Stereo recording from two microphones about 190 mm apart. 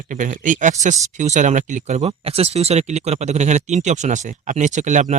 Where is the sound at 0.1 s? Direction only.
45° right (ahead or behind).